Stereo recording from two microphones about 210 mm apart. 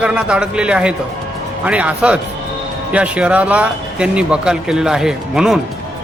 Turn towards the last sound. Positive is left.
turn(degrees=-5)  # may be behind; listen again after turning